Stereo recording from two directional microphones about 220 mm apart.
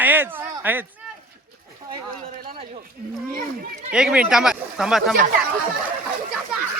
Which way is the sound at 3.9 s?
5° right (ahead or behind).